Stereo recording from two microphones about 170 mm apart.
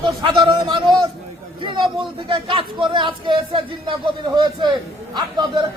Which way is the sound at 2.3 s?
30° right (ahead or behind).